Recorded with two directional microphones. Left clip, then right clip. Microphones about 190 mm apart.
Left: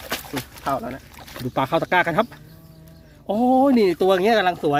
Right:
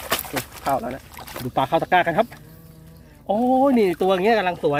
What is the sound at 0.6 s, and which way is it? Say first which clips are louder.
Speech: right 2 dB; 5° left (ahead or behind).